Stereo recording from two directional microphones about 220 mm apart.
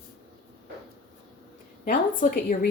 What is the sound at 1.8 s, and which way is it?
Speech, 40° left (ahead or behind).